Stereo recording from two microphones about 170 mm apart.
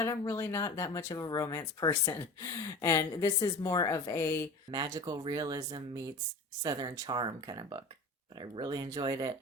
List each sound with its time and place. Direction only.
0.0 s a woman's voice: 20° left (ahead or behind)
4.7 s speech: 25° right (ahead or behind)